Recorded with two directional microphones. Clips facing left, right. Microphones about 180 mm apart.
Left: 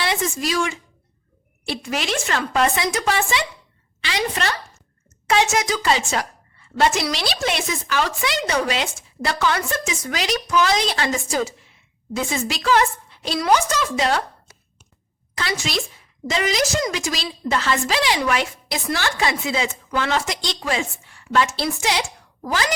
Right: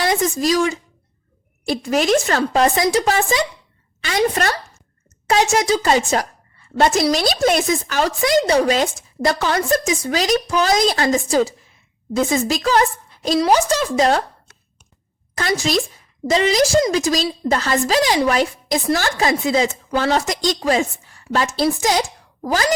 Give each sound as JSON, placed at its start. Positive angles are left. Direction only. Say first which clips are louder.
{"t": 0.0, "sound": "a woman's voice", "louder": "right 5 dB", "side_deg": -40}
{"t": 15.4, "sound": "a woman's voice", "louder": "right 6 dB", "side_deg": -40}